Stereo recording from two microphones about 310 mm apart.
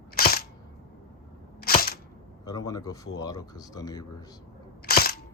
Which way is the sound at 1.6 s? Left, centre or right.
Left.